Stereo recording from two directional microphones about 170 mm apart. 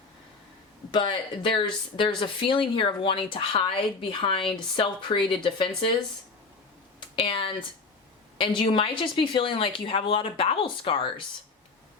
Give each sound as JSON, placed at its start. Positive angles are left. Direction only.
{"t": 0.9, "sound": "speech", "side_deg": 25}
{"t": 7.2, "sound": "a woman's voice", "side_deg": 30}